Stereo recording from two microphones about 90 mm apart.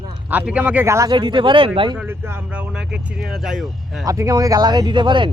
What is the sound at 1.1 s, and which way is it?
Speech, 60° right (ahead or behind).